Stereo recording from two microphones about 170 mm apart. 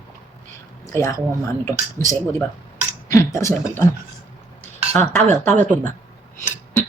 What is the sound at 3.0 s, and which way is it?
Speech, 20° left (ahead or behind).